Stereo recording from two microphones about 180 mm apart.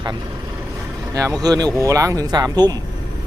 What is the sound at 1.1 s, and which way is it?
Speech, 20° right (ahead or behind).